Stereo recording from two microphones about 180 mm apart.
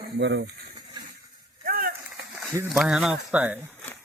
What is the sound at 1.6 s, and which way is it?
Speech, 55° right (ahead or behind).